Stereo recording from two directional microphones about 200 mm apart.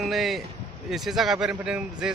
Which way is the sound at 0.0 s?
Centre (ahead or behind).